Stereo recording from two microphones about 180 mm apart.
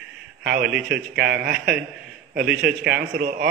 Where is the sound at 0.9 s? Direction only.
65° right (ahead or behind).